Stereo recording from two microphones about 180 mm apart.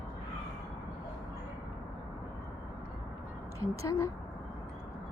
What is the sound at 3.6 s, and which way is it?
Speech, 15° left (ahead or behind).